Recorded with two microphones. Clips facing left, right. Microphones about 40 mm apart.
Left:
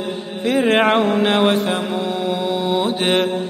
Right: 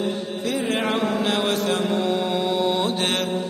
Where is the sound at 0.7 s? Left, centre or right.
Left; by 3.2 s centre.